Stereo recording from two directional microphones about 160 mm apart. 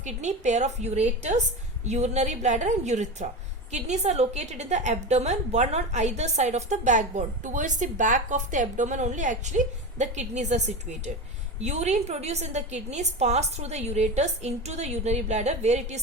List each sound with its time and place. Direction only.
0.0 s a woman's voice: 45° right (ahead or behind)
11.6 s a woman's voice: 45° right (ahead or behind)